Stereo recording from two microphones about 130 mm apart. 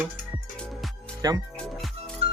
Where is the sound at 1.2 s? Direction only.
30° right (ahead or behind).